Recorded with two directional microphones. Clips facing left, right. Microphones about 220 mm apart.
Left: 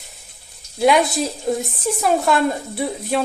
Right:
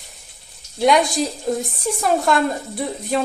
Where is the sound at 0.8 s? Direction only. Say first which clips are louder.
Even; centre (ahead or behind).